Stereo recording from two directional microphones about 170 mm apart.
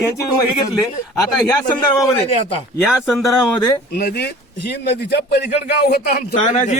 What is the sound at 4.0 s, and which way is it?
A man's voice, 70° left (ahead or behind).